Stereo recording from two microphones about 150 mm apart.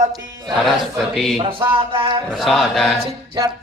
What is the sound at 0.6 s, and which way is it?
Speech, centre (ahead or behind).